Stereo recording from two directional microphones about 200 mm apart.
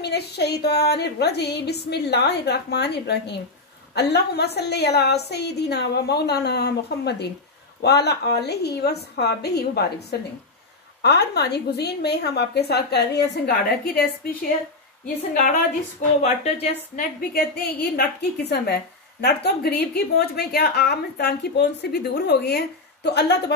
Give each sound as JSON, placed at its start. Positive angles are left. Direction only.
{"t": 0.0, "sound": "a woman's voice", "side_deg": 55}
{"t": 15.1, "sound": "speech", "side_deg": 40}
{"t": 17.3, "sound": "a woman's voice", "side_deg": 50}